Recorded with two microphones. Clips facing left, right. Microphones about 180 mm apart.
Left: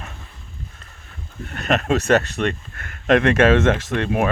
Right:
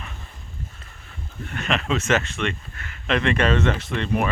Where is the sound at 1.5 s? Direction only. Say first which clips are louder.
Left 5 dB; 40° left (ahead or behind).